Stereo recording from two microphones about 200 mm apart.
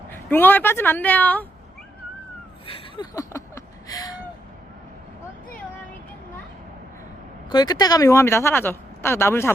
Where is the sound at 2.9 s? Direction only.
20° left (ahead or behind).